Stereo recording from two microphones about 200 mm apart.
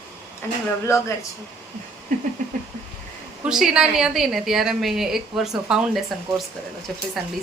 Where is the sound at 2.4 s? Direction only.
40° right (ahead or behind).